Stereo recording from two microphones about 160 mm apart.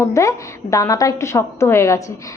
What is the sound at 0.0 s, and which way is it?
Speech, 20° left (ahead or behind).